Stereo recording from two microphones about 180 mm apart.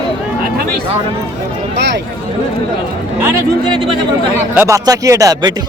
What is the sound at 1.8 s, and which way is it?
Speech, 70° right (ahead or behind).